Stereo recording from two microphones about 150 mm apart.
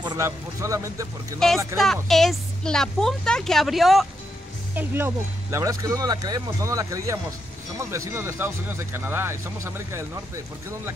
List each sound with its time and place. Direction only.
0.0 s speech: 25° right (ahead or behind)
2.0 s a woman's voice: centre (ahead or behind)
4.7 s speech: 15° right (ahead or behind)